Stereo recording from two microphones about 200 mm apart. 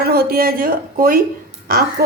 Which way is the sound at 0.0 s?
50° right (ahead or behind).